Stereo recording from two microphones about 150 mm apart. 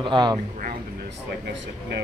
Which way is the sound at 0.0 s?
30° right (ahead or behind).